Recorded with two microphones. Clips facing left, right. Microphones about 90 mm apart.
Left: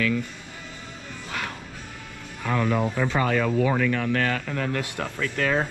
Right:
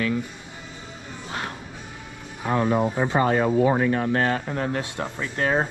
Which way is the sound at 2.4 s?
35° right (ahead or behind).